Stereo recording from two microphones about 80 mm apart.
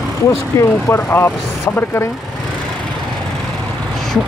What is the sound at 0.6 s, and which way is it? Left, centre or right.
Speech, left.